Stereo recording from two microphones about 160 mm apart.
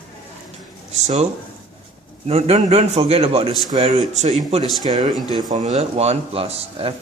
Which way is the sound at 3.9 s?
45° right (ahead or behind).